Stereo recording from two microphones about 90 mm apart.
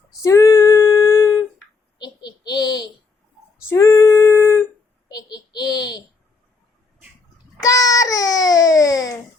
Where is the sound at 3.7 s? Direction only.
35° left (ahead or behind).